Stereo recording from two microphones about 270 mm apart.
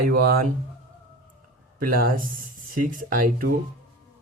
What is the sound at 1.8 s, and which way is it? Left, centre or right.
Speech, right.